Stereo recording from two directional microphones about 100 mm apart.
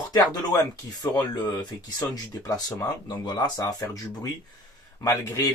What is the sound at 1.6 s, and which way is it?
Speech, 40° left (ahead or behind).